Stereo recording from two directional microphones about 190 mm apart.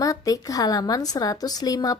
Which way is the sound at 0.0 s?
20° left (ahead or behind).